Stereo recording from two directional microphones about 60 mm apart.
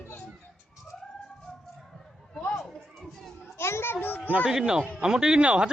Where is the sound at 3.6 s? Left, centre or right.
Left.